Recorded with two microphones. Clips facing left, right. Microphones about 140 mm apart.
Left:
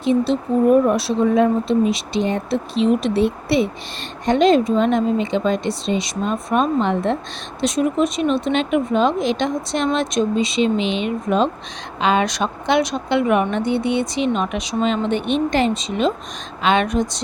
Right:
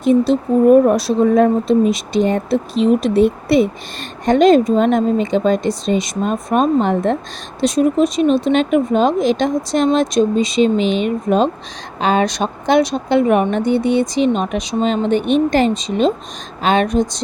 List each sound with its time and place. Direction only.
0.0 s a woman's voice: 45° right (ahead or behind)